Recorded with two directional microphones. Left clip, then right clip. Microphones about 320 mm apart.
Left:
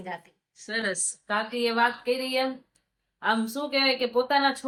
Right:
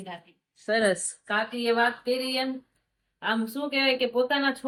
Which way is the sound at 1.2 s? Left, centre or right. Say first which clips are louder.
Right 1 dB; centre.